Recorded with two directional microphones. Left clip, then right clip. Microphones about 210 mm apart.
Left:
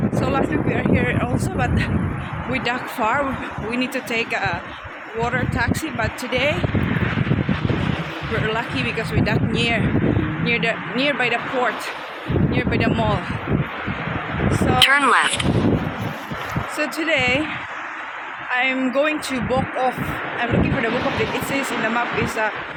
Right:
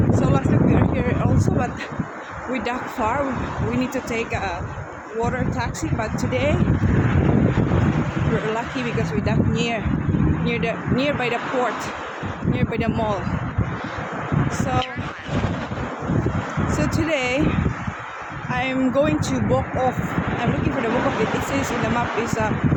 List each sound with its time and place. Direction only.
0.1 s speech: 5° right (ahead or behind)
8.5 s speech: 5° right (ahead or behind)
14.8 s speech: 45° left (ahead or behind)
16.7 s speech: 5° right (ahead or behind)
18.5 s speech: 10° right (ahead or behind)
21.5 s speech: centre (ahead or behind)